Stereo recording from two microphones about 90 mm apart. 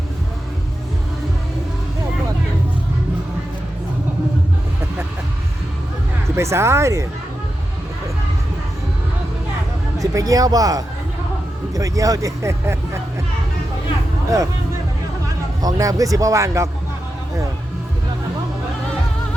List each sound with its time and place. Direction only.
6.3 s speech: 30° right (ahead or behind)
10.0 s speech: 40° right (ahead or behind)
14.3 s speech: 40° right (ahead or behind)
15.6 s speech: 40° right (ahead or behind)